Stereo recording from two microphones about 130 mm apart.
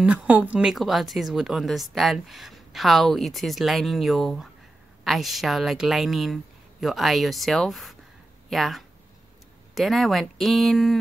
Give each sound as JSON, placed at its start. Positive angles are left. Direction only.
{"t": 0.0, "sound": "a woman's voice", "side_deg": -10}